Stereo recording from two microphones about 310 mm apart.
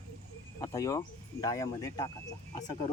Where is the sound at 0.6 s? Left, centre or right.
Centre.